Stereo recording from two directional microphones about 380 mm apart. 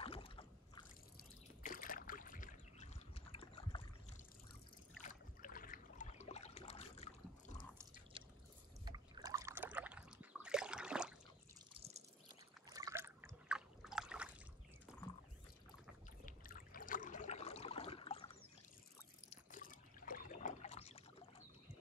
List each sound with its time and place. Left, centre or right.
0.0 s trickle: centre
5.0 s boat: left
8.8 s trickle: centre
12.6 s a sound: centre
16.3 s trickle: left
19.3 s trickle: left